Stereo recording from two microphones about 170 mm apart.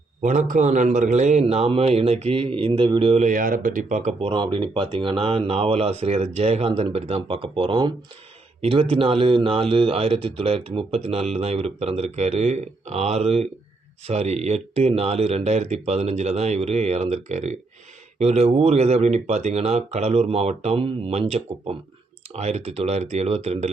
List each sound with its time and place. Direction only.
0.2 s a man's voice: 45° right (ahead or behind)
4.3 s a man's voice: 30° right (ahead or behind)